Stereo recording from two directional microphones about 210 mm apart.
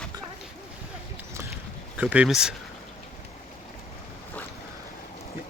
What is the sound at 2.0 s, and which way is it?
Speech, 5° right (ahead or behind).